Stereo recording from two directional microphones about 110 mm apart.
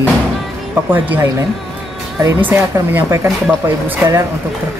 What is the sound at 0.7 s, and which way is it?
Speech, 20° right (ahead or behind).